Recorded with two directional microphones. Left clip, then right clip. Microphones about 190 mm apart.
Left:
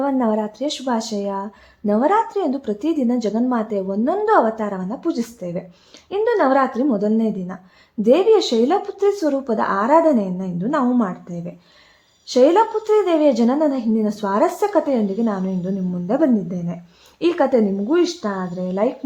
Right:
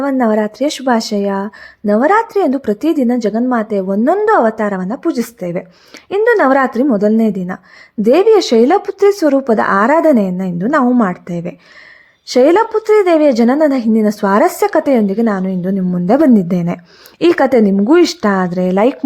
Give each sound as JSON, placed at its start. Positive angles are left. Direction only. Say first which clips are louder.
{"t": 0.0, "sound": "speech", "louder": "right 6 dB", "side_deg": -20}